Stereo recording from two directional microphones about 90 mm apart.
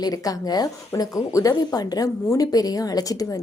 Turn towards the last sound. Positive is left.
turn(degrees=40)  # may be behind; listen again after turning